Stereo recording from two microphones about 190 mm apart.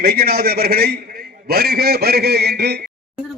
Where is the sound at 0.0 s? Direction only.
55° right (ahead or behind).